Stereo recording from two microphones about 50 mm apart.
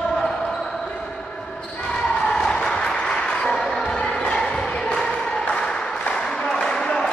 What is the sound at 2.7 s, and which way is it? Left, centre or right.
Music, centre.